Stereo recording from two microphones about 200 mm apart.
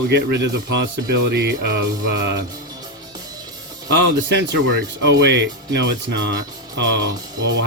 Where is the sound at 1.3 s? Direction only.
55° right (ahead or behind).